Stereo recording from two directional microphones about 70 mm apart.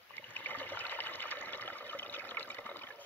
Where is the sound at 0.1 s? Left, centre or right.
Left.